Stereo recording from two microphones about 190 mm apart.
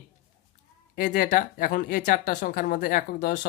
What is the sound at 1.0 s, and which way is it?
Speech, 45° left (ahead or behind).